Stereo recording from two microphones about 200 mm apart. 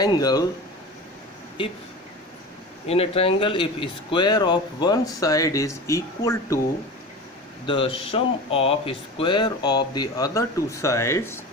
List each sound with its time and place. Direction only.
0.0 s speech: 20° left (ahead or behind)
1.6 s speech: 25° left (ahead or behind)
2.8 s speech: 30° left (ahead or behind)
7.7 s speech: 25° left (ahead or behind)